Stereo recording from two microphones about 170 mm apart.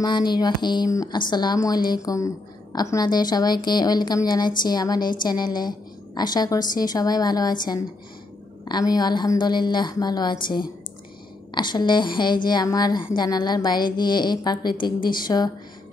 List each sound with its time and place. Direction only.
0.0 s a woman's voice: 25° left (ahead or behind)
8.6 s a woman's voice: 25° left (ahead or behind)